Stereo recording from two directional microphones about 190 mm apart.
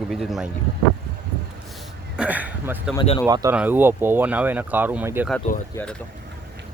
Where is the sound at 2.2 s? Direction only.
10° right (ahead or behind).